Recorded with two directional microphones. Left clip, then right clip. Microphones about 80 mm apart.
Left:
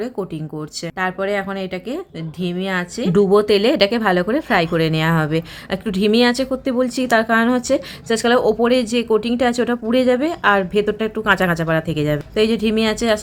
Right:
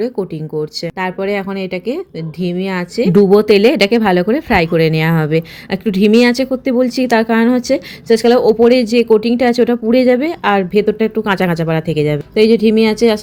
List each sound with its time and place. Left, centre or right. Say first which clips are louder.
0.9 s a woman's voice: right 1 dB; right